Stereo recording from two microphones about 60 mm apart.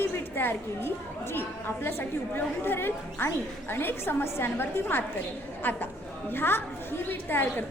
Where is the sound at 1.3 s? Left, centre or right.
Left.